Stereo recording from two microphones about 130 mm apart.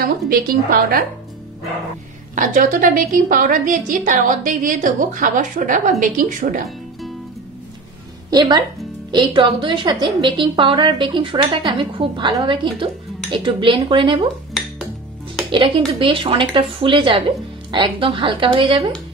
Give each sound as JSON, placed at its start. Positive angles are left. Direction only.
{"t": 0.0, "sound": "a woman's voice", "side_deg": -90}
{"t": 2.3, "sound": "a woman's voice", "side_deg": -90}
{"t": 8.3, "sound": "a woman's voice", "side_deg": -30}
{"t": 15.5, "sound": "a woman's voice", "side_deg": -40}